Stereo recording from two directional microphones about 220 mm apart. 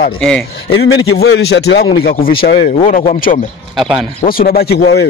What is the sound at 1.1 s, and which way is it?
A man's voice, 45° left (ahead or behind).